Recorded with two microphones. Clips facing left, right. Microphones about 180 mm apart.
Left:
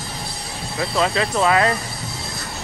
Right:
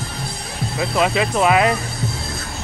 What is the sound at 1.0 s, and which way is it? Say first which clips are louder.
Speech: right 2 dB; 15° right (ahead or behind).